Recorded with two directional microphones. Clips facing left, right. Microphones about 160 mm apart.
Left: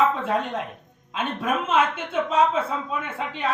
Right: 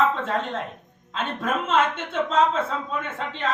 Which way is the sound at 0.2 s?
10° left (ahead or behind).